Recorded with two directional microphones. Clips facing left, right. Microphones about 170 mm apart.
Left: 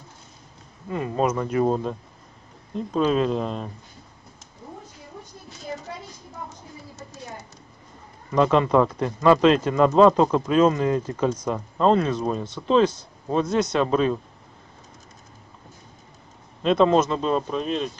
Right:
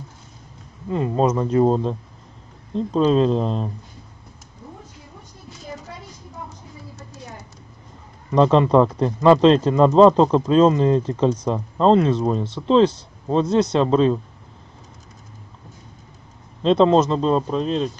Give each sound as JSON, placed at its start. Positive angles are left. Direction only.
{"t": 0.9, "sound": "speech", "side_deg": -25}
{"t": 8.3, "sound": "speech", "side_deg": -30}
{"t": 16.6, "sound": "speech", "side_deg": -25}